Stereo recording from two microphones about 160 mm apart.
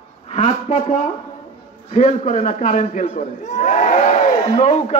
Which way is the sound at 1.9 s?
50° left (ahead or behind).